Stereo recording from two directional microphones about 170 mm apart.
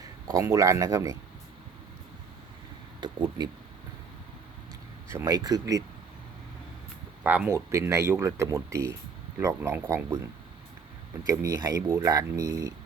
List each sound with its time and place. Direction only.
0.3 s speech: 20° right (ahead or behind)
3.0 s a sound: 25° right (ahead or behind)
3.4 s speech: 25° right (ahead or behind)
5.1 s speech: 20° right (ahead or behind)
7.3 s speech: 10° right (ahead or behind)
11.3 s speech: 20° right (ahead or behind)